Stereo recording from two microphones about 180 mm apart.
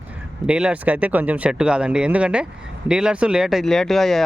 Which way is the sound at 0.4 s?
5° right (ahead or behind).